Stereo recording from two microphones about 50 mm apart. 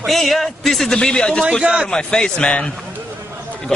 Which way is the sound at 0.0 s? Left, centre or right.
Centre.